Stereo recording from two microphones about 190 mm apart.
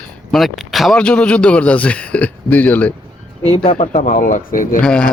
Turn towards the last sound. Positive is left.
turn(degrees=5)  # may be behind; listen again after turning